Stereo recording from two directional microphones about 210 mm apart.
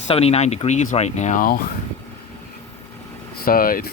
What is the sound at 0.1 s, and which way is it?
Speech, 30° left (ahead or behind).